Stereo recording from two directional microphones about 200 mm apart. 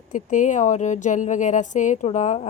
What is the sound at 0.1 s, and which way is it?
Speech, 40° left (ahead or behind).